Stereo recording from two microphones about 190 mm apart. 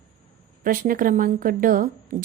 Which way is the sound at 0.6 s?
45° right (ahead or behind).